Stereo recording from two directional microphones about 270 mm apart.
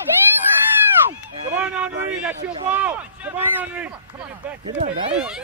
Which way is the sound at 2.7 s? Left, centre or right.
Centre.